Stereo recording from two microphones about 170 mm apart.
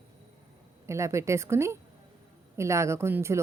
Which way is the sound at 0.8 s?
15° right (ahead or behind).